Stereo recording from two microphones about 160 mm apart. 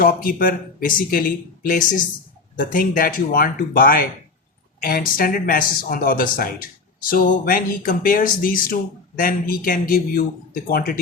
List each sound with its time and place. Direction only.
0.0 s speech: 65° left (ahead or behind)